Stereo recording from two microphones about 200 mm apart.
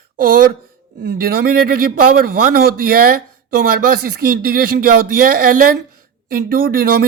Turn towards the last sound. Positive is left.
turn(degrees=-50)  # may be behind; listen again after turning